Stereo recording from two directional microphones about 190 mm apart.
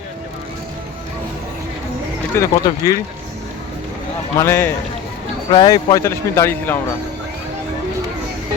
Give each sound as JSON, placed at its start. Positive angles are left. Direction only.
{"t": 2.3, "sound": "a man's voice", "side_deg": 15}
{"t": 4.4, "sound": "a man's voice", "side_deg": 10}
{"t": 5.5, "sound": "a man's voice", "side_deg": 25}